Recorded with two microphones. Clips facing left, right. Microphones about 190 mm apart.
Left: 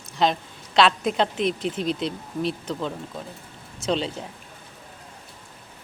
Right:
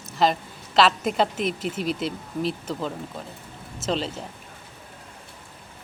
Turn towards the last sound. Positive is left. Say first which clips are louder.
# left 1 dB
turn(degrees=0)  # may be behind; listen again after turning